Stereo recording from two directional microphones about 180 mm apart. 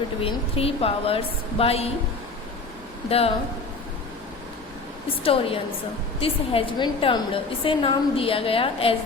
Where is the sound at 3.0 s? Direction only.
35° left (ahead or behind).